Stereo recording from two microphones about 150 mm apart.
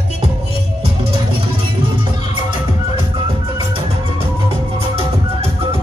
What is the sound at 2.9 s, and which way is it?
Music, 35° right (ahead or behind).